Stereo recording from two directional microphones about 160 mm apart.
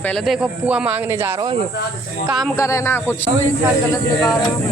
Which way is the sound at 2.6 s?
20° left (ahead or behind).